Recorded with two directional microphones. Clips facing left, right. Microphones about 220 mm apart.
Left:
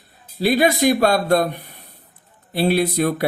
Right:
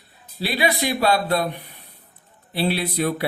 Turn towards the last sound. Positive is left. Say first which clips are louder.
# left 5 dB
turn(degrees=45)  # may be behind; listen again after turning